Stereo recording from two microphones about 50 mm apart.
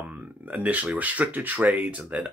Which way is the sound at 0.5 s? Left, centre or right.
Right.